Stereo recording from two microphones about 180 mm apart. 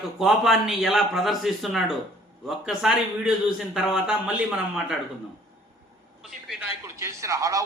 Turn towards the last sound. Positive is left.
turn(degrees=-15)  # may be behind; listen again after turning